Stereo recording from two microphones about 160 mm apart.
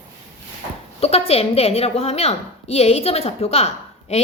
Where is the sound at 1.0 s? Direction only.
40° left (ahead or behind).